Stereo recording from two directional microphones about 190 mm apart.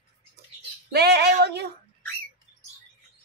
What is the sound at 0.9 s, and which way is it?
Female singing, 60° right (ahead or behind).